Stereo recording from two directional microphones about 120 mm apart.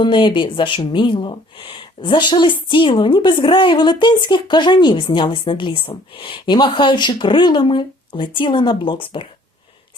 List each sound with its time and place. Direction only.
0.0 s speech: 40° left (ahead or behind)